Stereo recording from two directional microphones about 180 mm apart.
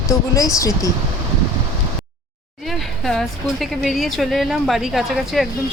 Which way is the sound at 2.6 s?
Centre (ahead or behind).